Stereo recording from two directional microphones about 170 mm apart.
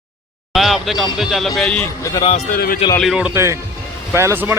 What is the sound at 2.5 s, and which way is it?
Speech, 60° left (ahead or behind).